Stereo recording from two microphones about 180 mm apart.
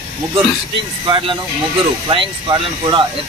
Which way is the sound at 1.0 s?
30° right (ahead or behind).